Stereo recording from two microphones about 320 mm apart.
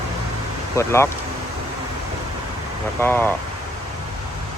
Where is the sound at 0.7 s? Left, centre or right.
Centre.